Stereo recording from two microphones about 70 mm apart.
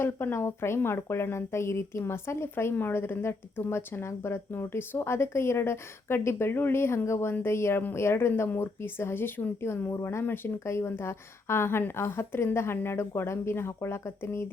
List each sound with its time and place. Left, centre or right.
0.0 s speech: left
9.9 s speech: left